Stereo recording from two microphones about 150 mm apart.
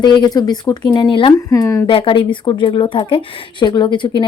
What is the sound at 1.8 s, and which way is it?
Speech, 35° left (ahead or behind).